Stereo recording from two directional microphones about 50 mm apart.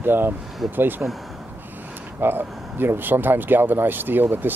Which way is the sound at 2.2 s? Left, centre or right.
Right.